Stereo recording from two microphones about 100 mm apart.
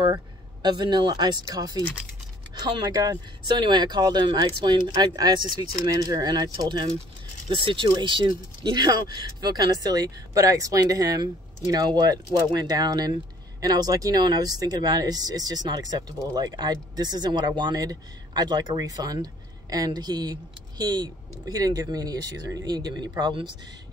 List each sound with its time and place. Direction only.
0.0 s speech: 45° right (ahead or behind)